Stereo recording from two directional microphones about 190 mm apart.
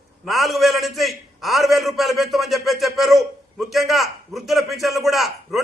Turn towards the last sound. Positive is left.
turn(degrees=0)  # may be behind; listen again after turning